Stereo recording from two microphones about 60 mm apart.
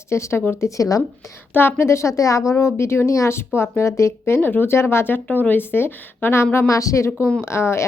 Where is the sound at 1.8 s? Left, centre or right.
Left.